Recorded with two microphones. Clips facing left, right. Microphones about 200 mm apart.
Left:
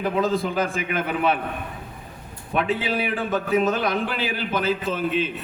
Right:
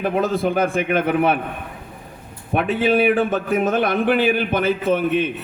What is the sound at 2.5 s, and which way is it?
A man's voice, 60° right (ahead or behind).